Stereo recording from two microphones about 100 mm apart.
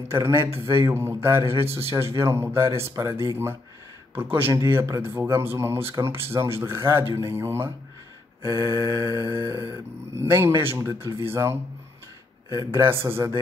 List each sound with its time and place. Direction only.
0.1 s speech: 25° right (ahead or behind)
4.8 s speech: 35° right (ahead or behind)
5.1 s speech: 20° right (ahead or behind)
12.5 s speech: 30° right (ahead or behind)